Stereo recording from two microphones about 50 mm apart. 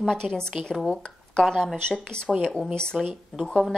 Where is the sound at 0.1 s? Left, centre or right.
Centre.